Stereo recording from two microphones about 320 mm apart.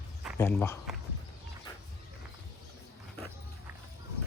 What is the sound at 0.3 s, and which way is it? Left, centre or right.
Speech, centre.